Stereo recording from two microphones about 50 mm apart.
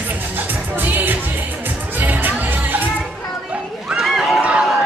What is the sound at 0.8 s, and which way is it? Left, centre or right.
Music, right.